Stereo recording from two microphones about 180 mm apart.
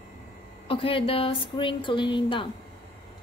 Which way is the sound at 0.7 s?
30° left (ahead or behind).